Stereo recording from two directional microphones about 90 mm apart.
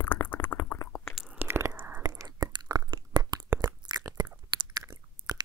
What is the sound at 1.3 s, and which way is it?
Whispering, 25° right (ahead or behind).